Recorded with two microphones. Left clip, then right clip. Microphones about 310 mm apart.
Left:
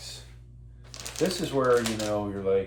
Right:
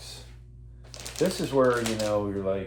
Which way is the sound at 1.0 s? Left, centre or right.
Centre.